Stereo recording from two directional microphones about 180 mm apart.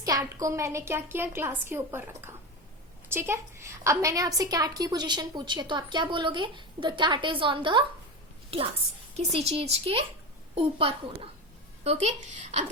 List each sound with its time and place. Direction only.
0.0 s a woman's voice: 20° right (ahead or behind); by 12.7 s 40° right (ahead or behind)